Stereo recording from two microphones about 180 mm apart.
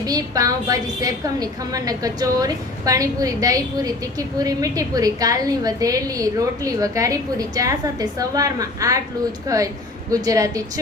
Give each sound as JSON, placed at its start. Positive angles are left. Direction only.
{"t": 0.0, "sound": "a woman's voice", "side_deg": -20}